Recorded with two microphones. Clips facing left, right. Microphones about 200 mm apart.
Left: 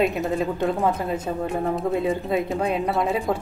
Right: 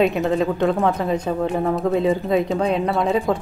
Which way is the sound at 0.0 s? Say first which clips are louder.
Right 4 dB; centre (ahead or behind).